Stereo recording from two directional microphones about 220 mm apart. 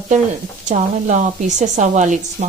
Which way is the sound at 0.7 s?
35° right (ahead or behind).